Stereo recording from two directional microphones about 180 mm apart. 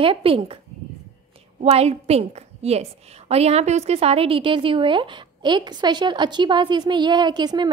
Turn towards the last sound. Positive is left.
turn(degrees=-25)  # may be behind; listen again after turning